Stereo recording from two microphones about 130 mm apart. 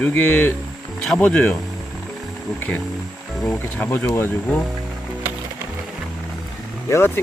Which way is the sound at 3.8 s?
15° left (ahead or behind).